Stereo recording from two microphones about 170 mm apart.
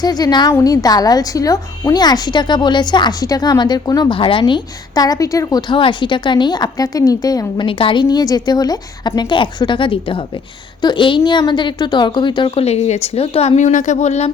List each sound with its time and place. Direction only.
0.0 s a woman's voice: 25° left (ahead or behind); by 14.3 s 40° left (ahead or behind)